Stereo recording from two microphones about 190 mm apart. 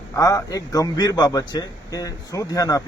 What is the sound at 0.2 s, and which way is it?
A man's voice, 20° left (ahead or behind).